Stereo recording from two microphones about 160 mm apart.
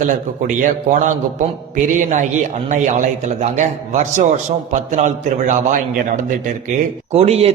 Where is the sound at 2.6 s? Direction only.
50° right (ahead or behind).